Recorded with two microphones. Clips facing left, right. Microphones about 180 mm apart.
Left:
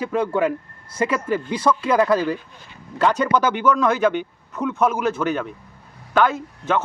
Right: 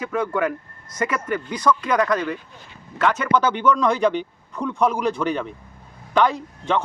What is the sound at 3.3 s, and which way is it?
A man's voice, 10° left (ahead or behind).